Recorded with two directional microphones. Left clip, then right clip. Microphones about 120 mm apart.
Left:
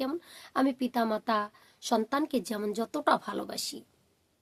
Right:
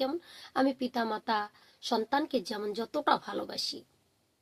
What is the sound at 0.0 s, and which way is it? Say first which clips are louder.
A woman's voice: right 1 dB; 35° left (ahead or behind).